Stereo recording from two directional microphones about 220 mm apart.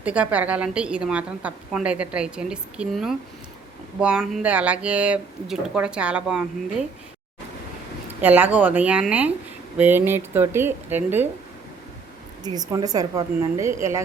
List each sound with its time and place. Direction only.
0.0 s a woman's voice: 5° right (ahead or behind)
8.2 s a woman's voice: 5° right (ahead or behind)
12.4 s a woman's voice: 15° right (ahead or behind)